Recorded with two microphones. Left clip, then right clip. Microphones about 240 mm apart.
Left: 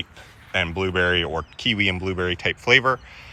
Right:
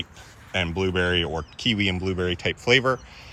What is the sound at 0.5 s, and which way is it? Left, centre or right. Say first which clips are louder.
Speech: left 2 dB; centre.